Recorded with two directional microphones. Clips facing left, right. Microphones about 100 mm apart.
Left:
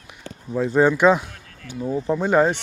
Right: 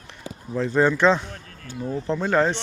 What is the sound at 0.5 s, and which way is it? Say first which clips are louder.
Speech: left 2 dB; 10° left (ahead or behind).